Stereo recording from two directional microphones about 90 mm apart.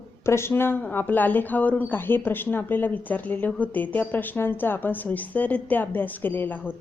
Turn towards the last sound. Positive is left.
turn(degrees=20)  # may be behind; listen again after turning